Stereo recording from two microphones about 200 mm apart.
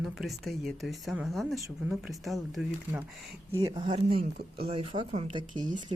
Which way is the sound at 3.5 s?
20° right (ahead or behind).